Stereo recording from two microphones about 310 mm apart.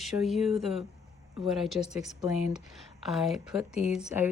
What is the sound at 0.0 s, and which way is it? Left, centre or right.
Speech, centre.